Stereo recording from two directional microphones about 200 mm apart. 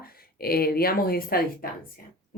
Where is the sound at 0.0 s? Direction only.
50° left (ahead or behind).